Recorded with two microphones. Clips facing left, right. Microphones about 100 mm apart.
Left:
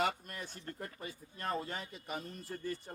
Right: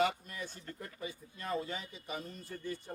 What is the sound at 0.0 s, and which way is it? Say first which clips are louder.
Speech: right 2 dB; 50° left (ahead or behind).